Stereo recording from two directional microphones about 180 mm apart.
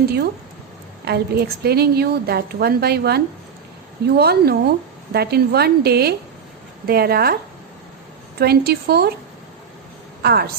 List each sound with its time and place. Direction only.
1.0 s a woman's voice: 60° right (ahead or behind)
4.2 s a woman's voice: 60° right (ahead or behind)
8.4 s a woman's voice: 60° right (ahead or behind)
10.2 s a woman's voice: 60° right (ahead or behind)